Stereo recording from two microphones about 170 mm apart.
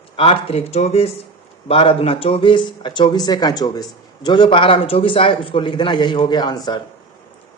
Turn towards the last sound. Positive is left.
turn(degrees=25)  # may be behind; listen again after turning